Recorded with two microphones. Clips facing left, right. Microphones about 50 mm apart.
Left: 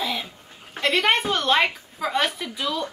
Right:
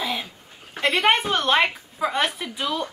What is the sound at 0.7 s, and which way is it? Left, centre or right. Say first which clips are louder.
A woman's voice: right 1 dB; centre.